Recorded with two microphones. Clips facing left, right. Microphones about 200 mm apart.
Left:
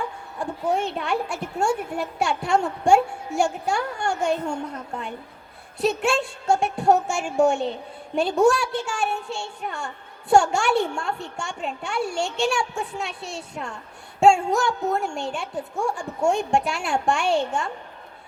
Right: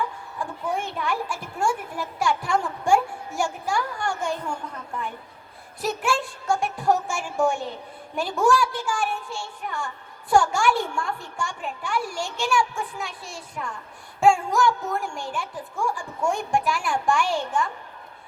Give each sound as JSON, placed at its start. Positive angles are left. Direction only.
{"t": 0.7, "sound": "speech", "side_deg": 25}